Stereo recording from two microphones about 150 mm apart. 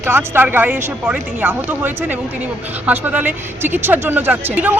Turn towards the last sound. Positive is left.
turn(degrees=-10)  # may be behind; listen again after turning